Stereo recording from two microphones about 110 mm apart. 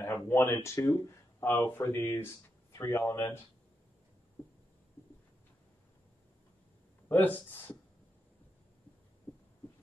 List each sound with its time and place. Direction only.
0.0 s speech: 20° left (ahead or behind)
7.1 s speech: 20° left (ahead or behind)